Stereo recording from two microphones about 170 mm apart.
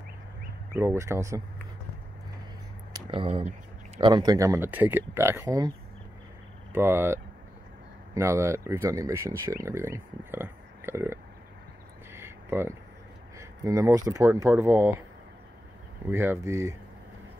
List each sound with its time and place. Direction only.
0.7 s speech: 15° right (ahead or behind)
2.9 s a sound: 30° right (ahead or behind)
4.0 s speech: 25° right (ahead or behind)
6.7 s speech: 15° right (ahead or behind)
12.1 s a sound: 15° right (ahead or behind)
13.4 s speech: 15° right (ahead or behind)
16.1 s speech: 15° right (ahead or behind)